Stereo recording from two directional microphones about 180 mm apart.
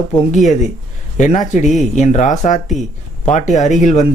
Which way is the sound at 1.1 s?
45° left (ahead or behind).